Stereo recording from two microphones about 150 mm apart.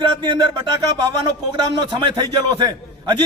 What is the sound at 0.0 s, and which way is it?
Speech, 35° right (ahead or behind).